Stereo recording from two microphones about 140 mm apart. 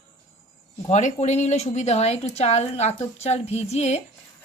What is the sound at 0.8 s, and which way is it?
Speech, 55° left (ahead or behind).